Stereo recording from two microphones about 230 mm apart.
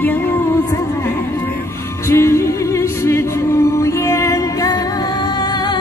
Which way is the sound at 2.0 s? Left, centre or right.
Centre.